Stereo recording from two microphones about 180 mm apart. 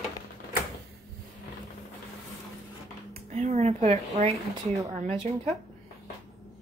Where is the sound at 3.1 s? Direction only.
40° right (ahead or behind).